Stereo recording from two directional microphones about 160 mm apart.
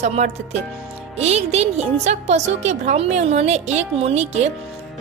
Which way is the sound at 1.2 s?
45° right (ahead or behind).